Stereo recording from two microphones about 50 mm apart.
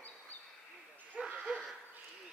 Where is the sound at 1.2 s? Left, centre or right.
Centre.